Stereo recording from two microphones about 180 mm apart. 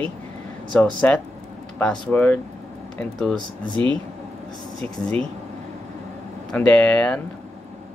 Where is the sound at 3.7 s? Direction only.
25° right (ahead or behind).